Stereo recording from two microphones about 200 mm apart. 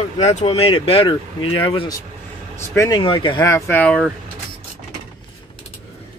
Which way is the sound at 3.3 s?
15° left (ahead or behind).